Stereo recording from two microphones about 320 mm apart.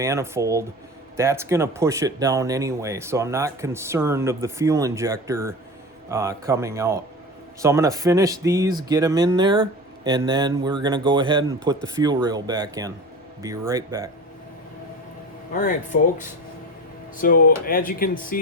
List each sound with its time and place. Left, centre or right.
0.0 s speech: centre
15.5 s speech: left
17.2 s speech: left